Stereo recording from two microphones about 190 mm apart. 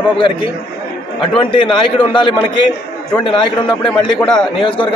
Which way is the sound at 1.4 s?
25° left (ahead or behind).